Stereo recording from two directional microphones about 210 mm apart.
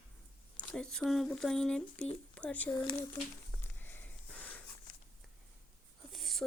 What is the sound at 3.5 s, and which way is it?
Sniff, 10° left (ahead or behind).